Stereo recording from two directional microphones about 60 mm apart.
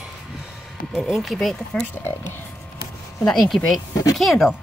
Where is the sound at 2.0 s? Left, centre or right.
Left.